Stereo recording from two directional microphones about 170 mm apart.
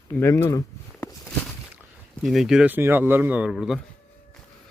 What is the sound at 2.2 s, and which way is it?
Speech, centre (ahead or behind).